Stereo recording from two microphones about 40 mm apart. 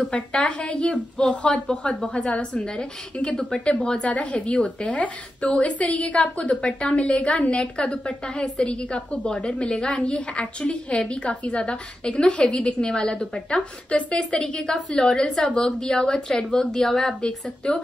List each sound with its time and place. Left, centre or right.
0.1 s a woman's voice: left
4.1 s a woman's voice: left; by 17.3 s centre
17.6 s a woman's voice: left